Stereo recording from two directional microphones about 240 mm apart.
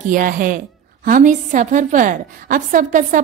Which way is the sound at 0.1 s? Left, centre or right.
Right.